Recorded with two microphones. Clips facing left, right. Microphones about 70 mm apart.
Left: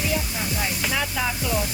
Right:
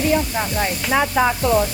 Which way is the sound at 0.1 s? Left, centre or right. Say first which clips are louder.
Right 8 dB; right.